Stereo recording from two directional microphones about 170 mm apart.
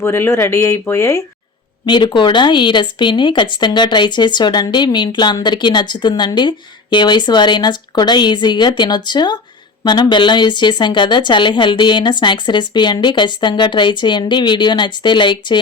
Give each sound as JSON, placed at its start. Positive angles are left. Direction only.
{"t": 0.0, "sound": "speech", "side_deg": 15}
{"t": 1.9, "sound": "speech", "side_deg": 30}